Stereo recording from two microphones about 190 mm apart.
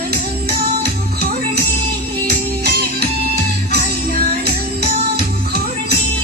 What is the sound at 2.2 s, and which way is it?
Music, 55° right (ahead or behind).